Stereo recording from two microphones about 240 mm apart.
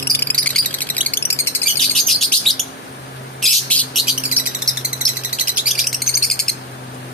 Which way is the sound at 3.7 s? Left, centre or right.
Centre.